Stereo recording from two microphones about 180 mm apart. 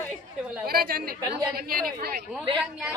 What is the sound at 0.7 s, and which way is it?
Speech, 55° right (ahead or behind).